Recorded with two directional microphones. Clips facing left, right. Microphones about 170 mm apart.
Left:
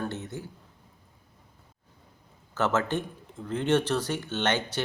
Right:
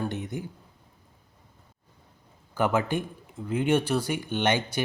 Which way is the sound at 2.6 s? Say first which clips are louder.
Right 1 dB; 10° right (ahead or behind).